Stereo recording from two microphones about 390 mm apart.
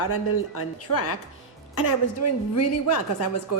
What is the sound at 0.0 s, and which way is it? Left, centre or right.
A woman's voice, left.